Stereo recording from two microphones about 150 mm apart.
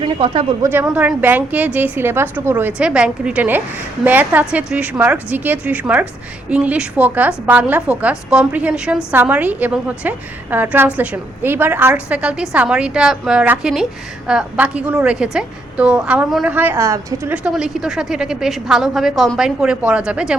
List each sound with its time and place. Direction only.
0.0 s speech: 35° right (ahead or behind)
0.6 s a woman's voice: 15° right (ahead or behind)
17.3 s a woman's voice: 5° right (ahead or behind)